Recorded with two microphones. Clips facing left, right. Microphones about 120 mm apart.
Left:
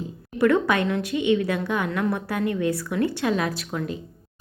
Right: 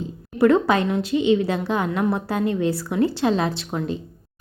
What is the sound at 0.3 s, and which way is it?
A woman's voice, 30° right (ahead or behind).